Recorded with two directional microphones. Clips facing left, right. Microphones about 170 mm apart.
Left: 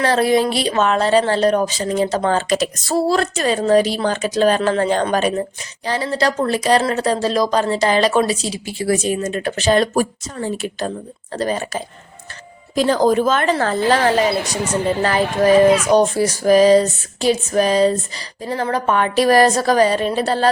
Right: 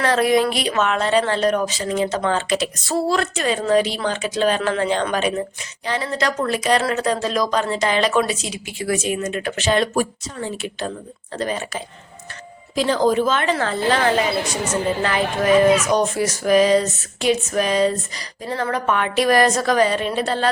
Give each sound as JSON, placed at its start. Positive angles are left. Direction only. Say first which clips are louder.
{"t": 0.0, "sound": "a woman's voice", "louder": "left 2 dB", "side_deg": 30}